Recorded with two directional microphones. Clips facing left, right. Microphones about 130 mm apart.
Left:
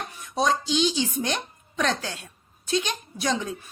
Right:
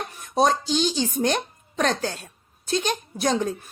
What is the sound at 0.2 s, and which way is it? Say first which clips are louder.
A woman's voice: right 4 dB; 45° right (ahead or behind).